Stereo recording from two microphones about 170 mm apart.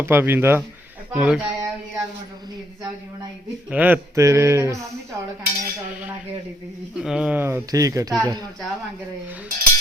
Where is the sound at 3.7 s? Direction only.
10° right (ahead or behind).